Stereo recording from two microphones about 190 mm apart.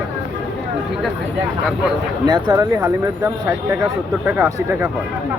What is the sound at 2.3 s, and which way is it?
Speech, 20° right (ahead or behind).